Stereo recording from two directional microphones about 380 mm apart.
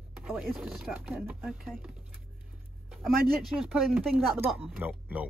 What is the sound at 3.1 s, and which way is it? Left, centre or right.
Speech, right.